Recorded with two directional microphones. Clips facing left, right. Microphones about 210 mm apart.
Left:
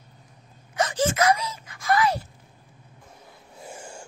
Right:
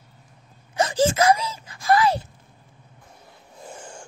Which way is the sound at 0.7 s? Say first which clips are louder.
Right 3 dB; 30° right (ahead or behind).